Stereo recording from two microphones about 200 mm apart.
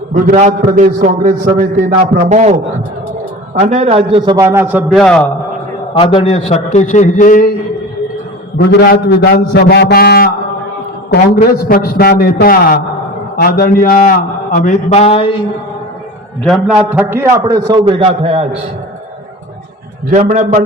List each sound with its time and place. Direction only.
0.1 s a man's voice: 40° right (ahead or behind)
4.4 s a man's voice: 10° right (ahead or behind)
4.9 s a man's voice: 5° left (ahead or behind)
5.9 s a man's voice: 25° left (ahead or behind)
8.5 s a man's voice: 50° left (ahead or behind)
11.7 s a man's voice: 50° left (ahead or behind); by 15.4 s 30° left (ahead or behind)
16.4 s a man's voice: centre (ahead or behind); by 18.4 s 25° right (ahead or behind)
20.1 s a man's voice: 35° right (ahead or behind)